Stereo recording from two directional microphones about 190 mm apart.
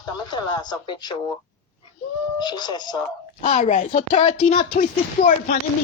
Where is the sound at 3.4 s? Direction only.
35° left (ahead or behind).